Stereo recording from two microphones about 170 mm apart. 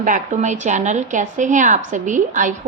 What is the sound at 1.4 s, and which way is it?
A woman's voice, 45° right (ahead or behind).